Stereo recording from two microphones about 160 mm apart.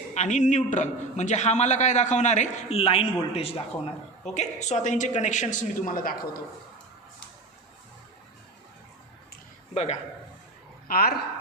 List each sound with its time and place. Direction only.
0.1 s a man's voice: 45° left (ahead or behind)
9.7 s a man's voice: 40° left (ahead or behind)
10.8 s a woman's voice: 65° left (ahead or behind)